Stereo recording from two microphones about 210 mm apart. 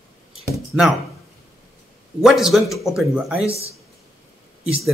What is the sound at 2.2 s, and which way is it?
A man's voice, centre (ahead or behind).